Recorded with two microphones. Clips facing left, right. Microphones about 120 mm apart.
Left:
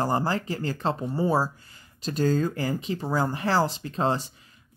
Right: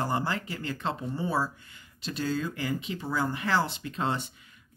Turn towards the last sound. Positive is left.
turn(degrees=35)  # may be behind; listen again after turning